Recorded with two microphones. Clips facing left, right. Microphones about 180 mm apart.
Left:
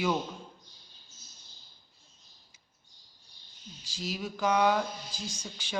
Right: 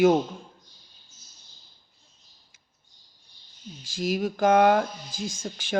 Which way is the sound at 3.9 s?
50° right (ahead or behind).